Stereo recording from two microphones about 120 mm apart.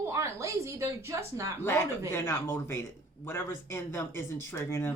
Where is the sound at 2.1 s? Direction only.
20° left (ahead or behind).